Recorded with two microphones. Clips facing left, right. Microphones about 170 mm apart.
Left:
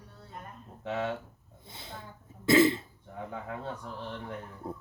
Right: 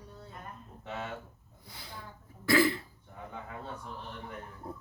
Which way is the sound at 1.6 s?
25° left (ahead or behind).